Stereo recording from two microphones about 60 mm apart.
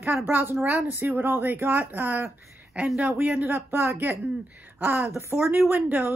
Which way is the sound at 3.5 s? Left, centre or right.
Right.